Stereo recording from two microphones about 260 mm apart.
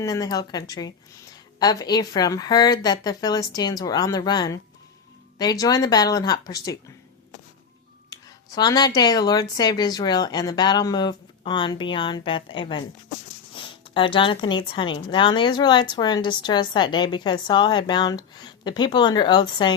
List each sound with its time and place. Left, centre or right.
0.0 s speech: centre
8.5 s speech: centre